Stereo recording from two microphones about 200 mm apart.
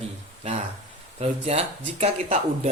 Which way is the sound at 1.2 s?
30° right (ahead or behind).